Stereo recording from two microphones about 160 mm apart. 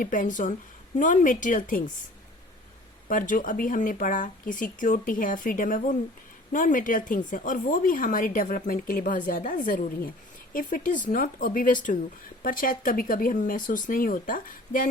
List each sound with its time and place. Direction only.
0.0 s a woman's voice: 55° left (ahead or behind)
3.1 s speech: 55° left (ahead or behind)